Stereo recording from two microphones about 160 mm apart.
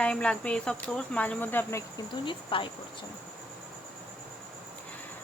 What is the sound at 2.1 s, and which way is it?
Speech, 30° left (ahead or behind).